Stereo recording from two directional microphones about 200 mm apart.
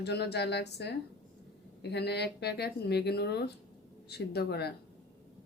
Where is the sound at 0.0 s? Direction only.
55° left (ahead or behind).